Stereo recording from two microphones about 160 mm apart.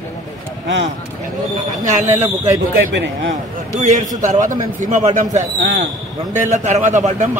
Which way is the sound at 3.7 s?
50° right (ahead or behind).